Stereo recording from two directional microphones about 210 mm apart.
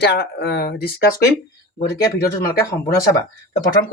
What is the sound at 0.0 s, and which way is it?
Speech, 50° left (ahead or behind).